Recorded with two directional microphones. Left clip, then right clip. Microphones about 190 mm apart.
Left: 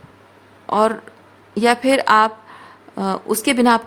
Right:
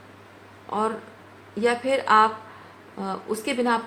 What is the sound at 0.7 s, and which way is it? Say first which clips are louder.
A woman's voice: left 9 dB; 60° left (ahead or behind).